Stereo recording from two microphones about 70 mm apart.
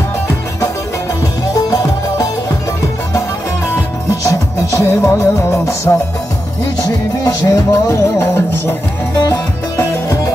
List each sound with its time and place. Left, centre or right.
1.5 s music: left
4.1 s music: left